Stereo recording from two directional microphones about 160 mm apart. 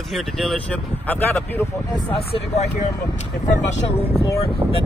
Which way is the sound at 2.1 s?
40° left (ahead or behind).